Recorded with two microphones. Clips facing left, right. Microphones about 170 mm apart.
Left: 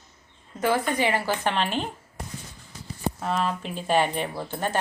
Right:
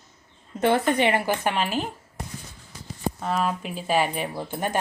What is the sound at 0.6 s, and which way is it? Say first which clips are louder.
Speech: right 3 dB; 25° right (ahead or behind).